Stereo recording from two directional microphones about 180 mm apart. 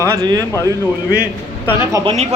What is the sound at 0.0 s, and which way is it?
Speech, 20° right (ahead or behind).